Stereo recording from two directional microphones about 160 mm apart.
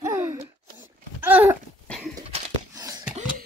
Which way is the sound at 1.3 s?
15° right (ahead or behind).